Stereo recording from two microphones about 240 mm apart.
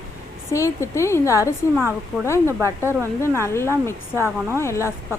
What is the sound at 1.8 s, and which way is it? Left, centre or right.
A woman's voice, centre.